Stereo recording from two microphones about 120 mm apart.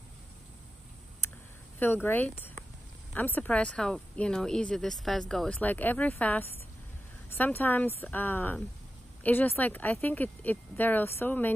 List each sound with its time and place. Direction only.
1.8 s speech: 15° left (ahead or behind)
5.6 s speech: 15° left (ahead or behind)